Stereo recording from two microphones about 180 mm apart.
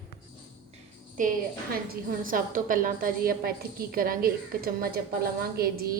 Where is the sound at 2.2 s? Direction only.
50° right (ahead or behind).